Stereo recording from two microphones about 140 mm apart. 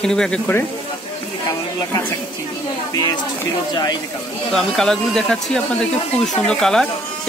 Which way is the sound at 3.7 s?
30° left (ahead or behind).